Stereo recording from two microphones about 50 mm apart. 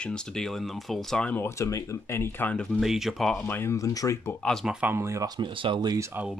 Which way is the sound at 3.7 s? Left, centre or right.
Left.